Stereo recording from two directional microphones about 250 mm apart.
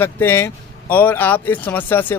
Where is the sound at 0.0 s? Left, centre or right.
Centre.